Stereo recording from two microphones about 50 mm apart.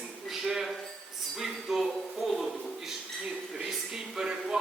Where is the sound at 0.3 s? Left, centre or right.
Centre.